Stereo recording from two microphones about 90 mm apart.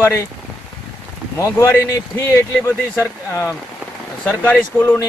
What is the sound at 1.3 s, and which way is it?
Speech, 30° left (ahead or behind).